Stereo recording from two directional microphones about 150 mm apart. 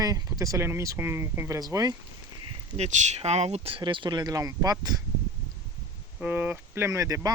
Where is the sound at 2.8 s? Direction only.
45° right (ahead or behind); by 4.9 s 25° right (ahead or behind).